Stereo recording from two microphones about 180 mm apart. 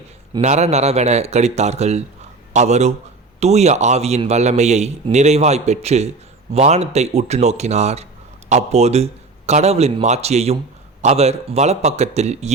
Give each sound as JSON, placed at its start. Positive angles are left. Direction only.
{"t": 0.4, "sound": "a man's voice", "side_deg": -35}